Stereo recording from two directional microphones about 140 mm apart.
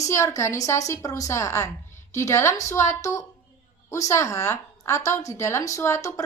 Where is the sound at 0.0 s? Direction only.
20° left (ahead or behind).